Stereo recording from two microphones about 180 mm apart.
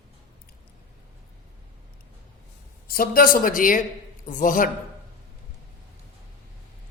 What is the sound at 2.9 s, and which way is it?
Speech, 55° left (ahead or behind).